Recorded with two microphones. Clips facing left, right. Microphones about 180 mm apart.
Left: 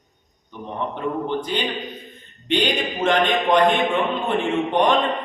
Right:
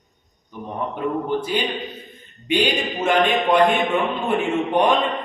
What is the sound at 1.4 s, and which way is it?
A man's voice, 10° right (ahead or behind).